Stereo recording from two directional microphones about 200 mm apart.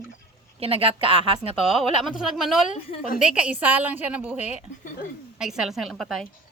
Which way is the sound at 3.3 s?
5° right (ahead or behind).